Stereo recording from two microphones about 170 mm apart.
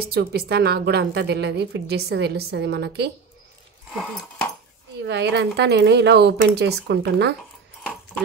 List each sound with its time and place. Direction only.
0.0 s a woman's voice: 70° right (ahead or behind)
3.9 s dog: centre (ahead or behind)
5.0 s speech: 85° right